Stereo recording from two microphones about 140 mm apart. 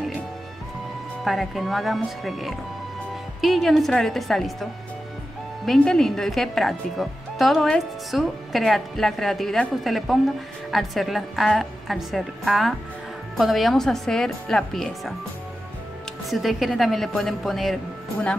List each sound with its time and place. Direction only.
1.2 s speech: centre (ahead or behind)
5.7 s speech: 5° left (ahead or behind)
16.3 s speech: centre (ahead or behind)